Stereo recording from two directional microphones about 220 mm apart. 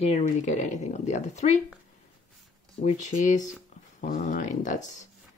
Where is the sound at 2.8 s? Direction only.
35° left (ahead or behind).